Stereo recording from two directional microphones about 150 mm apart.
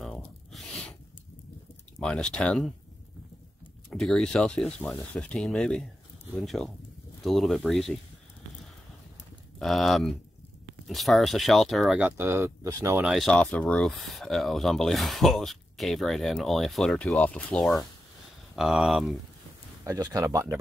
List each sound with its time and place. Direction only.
0.0 s a sound: centre (ahead or behind)
2.0 s speech: 5° left (ahead or behind)
3.9 s speech: centre (ahead or behind)
9.6 s speech: centre (ahead or behind); by 13.0 s 20° right (ahead or behind)
13.0 s speech: centre (ahead or behind)
19.8 s speech: 20° right (ahead or behind)